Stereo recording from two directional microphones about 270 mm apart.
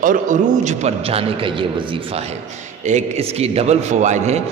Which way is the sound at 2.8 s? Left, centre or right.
Right.